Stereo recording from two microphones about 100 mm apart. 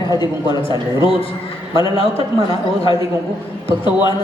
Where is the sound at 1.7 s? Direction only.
65° left (ahead or behind).